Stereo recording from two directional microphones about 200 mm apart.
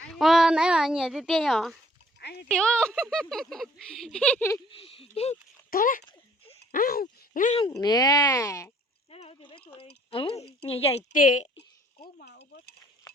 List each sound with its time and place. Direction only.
0.1 s speech: centre (ahead or behind)
4.7 s speech: 25° left (ahead or behind)
5.7 s speech: 45° left (ahead or behind)
6.1 s giggle: 30° left (ahead or behind)
6.7 s speech: 45° left (ahead or behind)
7.6 s speech: 20° left (ahead or behind)
9.0 s a sound: 30° left (ahead or behind)
9.6 s speech: 25° left (ahead or behind)
11.1 s a woman's voice: 40° left (ahead or behind)
12.2 s a sound: 55° left (ahead or behind)